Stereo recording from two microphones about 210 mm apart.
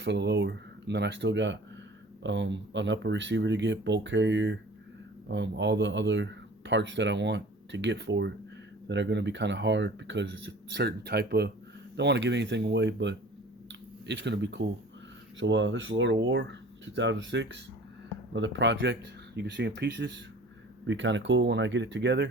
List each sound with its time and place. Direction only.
0.0 s speech: 55° right (ahead or behind)
13.7 s a sound: 55° right (ahead or behind)
15.4 s speech: 60° right (ahead or behind)